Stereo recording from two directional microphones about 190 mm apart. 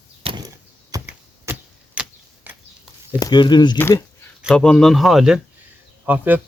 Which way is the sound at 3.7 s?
10° left (ahead or behind).